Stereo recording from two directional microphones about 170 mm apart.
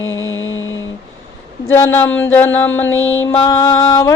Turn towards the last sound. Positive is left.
turn(degrees=15)  # may be behind; listen again after turning